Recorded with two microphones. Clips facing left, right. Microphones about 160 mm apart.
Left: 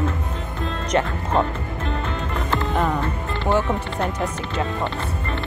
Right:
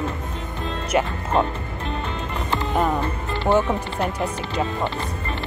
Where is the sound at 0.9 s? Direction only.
5° right (ahead or behind).